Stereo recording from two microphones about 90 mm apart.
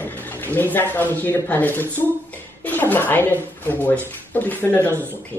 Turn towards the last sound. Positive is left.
turn(degrees=20)  # may be behind; listen again after turning